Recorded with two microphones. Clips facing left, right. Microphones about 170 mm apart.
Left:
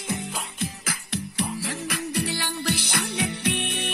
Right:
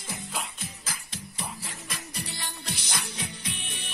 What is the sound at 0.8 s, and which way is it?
Music, 70° left (ahead or behind).